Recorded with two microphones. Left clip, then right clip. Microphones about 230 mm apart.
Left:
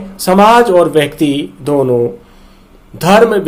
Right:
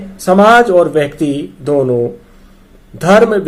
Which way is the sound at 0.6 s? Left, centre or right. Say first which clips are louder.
Left 1 dB; centre.